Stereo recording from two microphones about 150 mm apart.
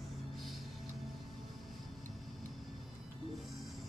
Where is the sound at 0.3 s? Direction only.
Centre (ahead or behind).